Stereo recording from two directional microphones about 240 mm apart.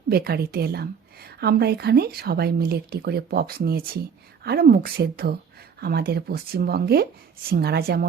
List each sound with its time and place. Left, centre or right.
0.1 s a woman's voice: right